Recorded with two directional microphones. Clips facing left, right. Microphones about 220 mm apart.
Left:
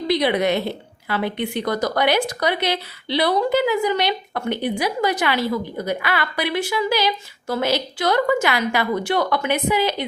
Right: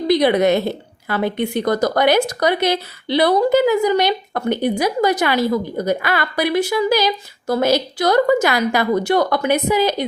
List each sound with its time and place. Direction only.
0.1 s speech: 45° right (ahead or behind)